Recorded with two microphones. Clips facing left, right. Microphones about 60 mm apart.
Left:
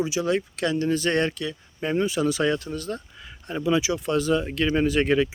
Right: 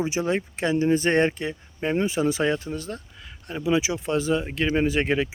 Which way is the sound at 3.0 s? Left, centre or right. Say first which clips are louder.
Left 2 dB; centre.